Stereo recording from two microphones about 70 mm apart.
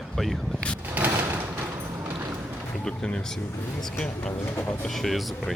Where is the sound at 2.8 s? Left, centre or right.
Centre.